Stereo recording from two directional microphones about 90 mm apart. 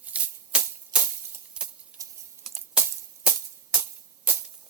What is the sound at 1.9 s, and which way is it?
Typing, 15° right (ahead or behind).